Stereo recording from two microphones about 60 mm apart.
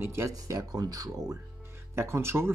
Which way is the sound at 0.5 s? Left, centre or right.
Right.